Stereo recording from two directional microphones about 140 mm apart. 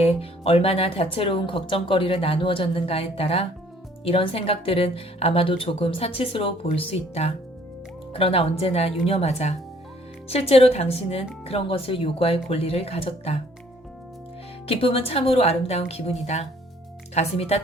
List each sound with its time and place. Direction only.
0.0 s speech: 45° left (ahead or behind)
14.7 s speech: 45° left (ahead or behind)